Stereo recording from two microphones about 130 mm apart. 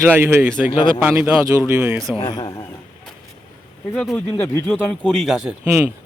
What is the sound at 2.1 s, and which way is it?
Speech, 40° left (ahead or behind).